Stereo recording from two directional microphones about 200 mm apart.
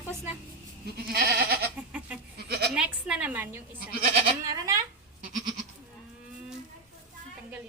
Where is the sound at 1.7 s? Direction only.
5° right (ahead or behind).